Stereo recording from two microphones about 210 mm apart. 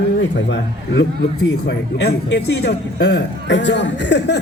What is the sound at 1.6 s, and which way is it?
A man's voice, 50° left (ahead or behind).